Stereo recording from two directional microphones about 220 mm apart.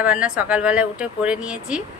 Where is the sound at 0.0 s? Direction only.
5° right (ahead or behind).